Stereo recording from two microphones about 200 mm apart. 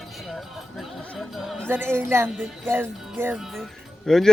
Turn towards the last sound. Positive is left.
turn(degrees=0)  # may be behind; listen again after turning